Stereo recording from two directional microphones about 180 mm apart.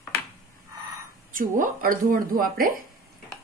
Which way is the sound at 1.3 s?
45° right (ahead or behind).